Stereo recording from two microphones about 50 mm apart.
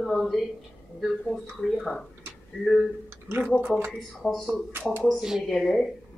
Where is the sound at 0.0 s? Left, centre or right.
Centre.